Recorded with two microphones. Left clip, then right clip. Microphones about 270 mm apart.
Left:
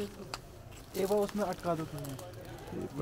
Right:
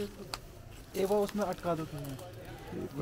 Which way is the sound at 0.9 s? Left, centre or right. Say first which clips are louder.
Right 1 dB; right.